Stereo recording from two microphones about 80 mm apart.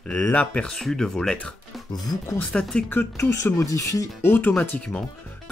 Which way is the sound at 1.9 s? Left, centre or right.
Left.